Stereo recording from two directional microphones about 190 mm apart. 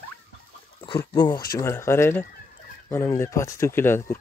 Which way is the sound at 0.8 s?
25° left (ahead or behind).